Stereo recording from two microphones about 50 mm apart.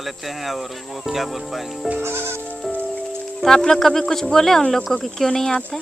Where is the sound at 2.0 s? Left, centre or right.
Right.